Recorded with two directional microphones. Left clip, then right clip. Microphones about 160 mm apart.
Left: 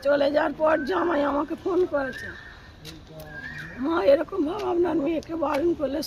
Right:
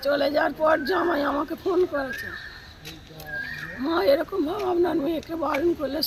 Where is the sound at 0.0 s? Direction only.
Centre (ahead or behind).